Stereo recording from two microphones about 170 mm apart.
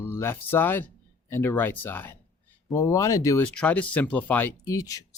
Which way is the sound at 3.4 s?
5° left (ahead or behind).